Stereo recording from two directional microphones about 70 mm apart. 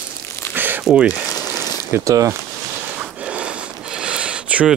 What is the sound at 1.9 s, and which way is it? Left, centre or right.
Speech, right.